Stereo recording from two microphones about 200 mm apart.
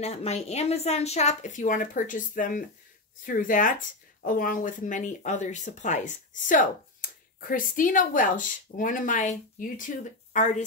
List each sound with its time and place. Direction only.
0.0 s speech: 30° left (ahead or behind)